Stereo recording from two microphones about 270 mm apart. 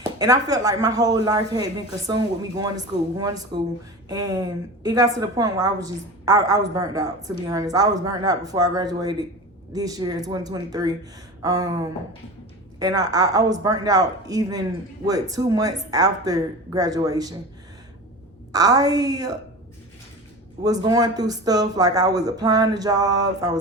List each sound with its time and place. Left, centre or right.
0.0 s a woman's voice: centre
18.5 s a woman's voice: centre
20.7 s a woman's voice: centre